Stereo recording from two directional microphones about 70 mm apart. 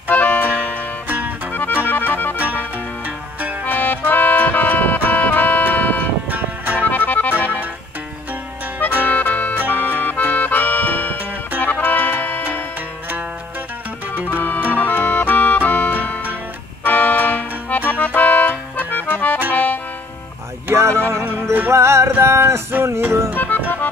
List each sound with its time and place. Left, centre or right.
0.1 s music: centre
1.0 s music: right
1.5 s music: left
3.6 s accordion: left
6.3 s music: right
6.8 s accordion: left
9.0 s accordion: left
11.6 s music: left
14.4 s music: left
20.7 s music: right
21.3 s music: right
22.2 s a sound: right
23.3 s music: left